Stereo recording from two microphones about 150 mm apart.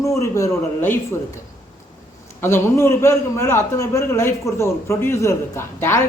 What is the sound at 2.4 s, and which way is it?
A man's voice, 15° left (ahead or behind).